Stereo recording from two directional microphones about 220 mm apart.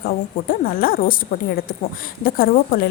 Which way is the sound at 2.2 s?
40° left (ahead or behind).